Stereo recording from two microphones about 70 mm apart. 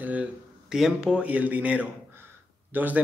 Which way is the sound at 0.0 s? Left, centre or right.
Right.